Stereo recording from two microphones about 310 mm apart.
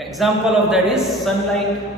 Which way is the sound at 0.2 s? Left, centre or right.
Centre.